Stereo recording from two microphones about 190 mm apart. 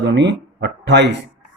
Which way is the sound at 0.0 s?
65° right (ahead or behind).